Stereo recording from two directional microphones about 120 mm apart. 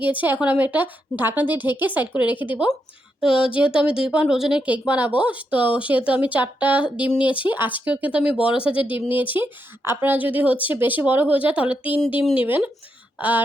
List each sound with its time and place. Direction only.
0.0 s speech: 15° right (ahead or behind)